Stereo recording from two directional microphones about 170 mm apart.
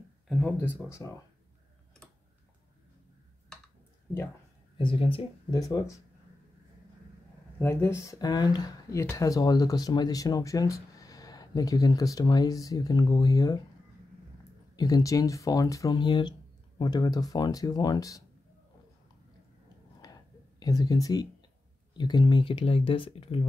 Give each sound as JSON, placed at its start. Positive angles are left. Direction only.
{"t": 0.3, "sound": "speech", "side_deg": 0}
{"t": 0.6, "sound": "speech", "side_deg": 15}
{"t": 4.7, "sound": "speech", "side_deg": 30}
{"t": 5.6, "sound": "speech", "side_deg": 20}
{"t": 7.5, "sound": "speech", "side_deg": 15}
{"t": 14.8, "sound": "speech", "side_deg": 20}
{"t": 20.0, "sound": "a sound", "side_deg": 20}
{"t": 21.9, "sound": "speech", "side_deg": 25}